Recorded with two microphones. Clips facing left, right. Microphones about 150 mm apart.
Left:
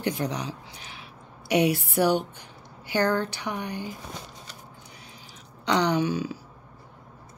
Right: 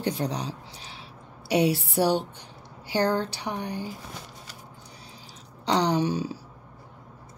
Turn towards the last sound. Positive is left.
turn(degrees=-35)  # may be behind; listen again after turning